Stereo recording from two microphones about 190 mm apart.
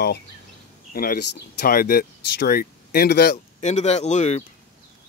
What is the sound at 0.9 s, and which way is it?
Speech, 55° left (ahead or behind).